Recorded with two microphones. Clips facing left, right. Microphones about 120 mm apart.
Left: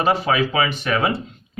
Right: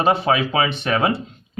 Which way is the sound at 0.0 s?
30° right (ahead or behind).